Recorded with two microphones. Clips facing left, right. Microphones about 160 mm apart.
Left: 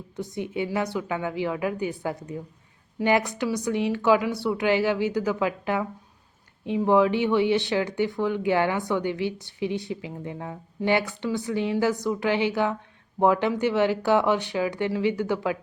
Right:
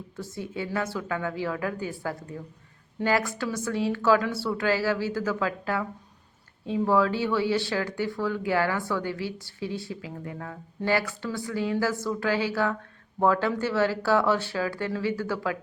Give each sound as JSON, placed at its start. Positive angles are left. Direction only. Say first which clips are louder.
{"t": 0.2, "sound": "a woman's voice", "louder": "left 5 dB", "side_deg": 20}